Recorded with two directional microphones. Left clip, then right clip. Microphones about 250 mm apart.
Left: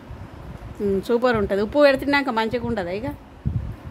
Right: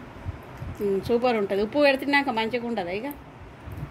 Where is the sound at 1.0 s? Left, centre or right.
Left.